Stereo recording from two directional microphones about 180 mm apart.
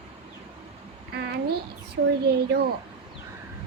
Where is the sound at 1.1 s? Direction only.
65° right (ahead or behind).